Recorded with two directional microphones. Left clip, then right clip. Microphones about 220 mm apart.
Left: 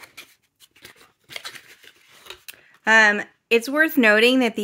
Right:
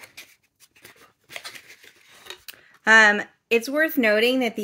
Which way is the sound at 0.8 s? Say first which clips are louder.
Left 2 dB; 10° left (ahead or behind).